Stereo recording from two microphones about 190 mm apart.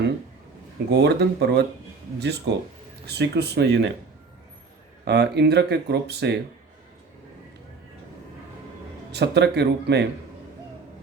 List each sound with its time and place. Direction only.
0.9 s speech: 60° right (ahead or behind)
5.0 s speech: 60° right (ahead or behind)
9.1 s speech: 60° right (ahead or behind)